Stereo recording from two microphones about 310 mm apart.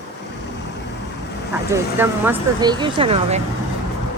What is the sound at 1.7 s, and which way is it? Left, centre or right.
Speech, centre.